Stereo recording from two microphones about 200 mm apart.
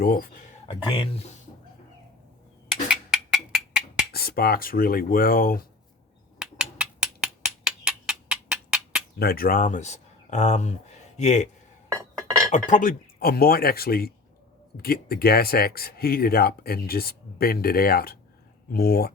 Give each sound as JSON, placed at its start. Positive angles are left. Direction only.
{"t": 0.0, "sound": "speech", "side_deg": 45}
{"t": 0.7, "sound": "speech", "side_deg": 30}
{"t": 2.9, "sound": "a sound", "side_deg": 0}
{"t": 4.1, "sound": "speech", "side_deg": 50}
{"t": 6.4, "sound": "a sound", "side_deg": -5}
{"t": 9.1, "sound": "speech", "side_deg": 50}
{"t": 12.5, "sound": "speech", "side_deg": 40}